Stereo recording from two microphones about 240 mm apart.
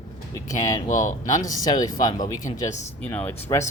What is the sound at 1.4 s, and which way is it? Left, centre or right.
A man's voice, centre.